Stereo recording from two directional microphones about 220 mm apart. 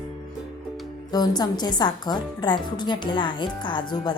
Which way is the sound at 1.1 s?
20° left (ahead or behind).